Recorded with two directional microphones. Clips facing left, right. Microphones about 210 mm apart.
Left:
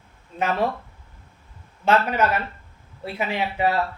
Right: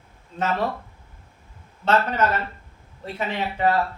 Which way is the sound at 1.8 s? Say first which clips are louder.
Left 1 dB; 10° left (ahead or behind).